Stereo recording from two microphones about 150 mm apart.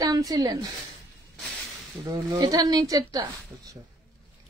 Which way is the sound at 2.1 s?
25° right (ahead or behind).